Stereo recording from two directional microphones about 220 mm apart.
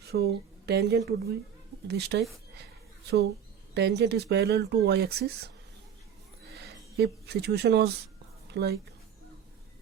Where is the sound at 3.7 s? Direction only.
50° right (ahead or behind).